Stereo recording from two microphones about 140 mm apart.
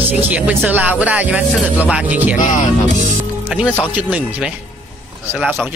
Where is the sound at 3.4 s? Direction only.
10° right (ahead or behind).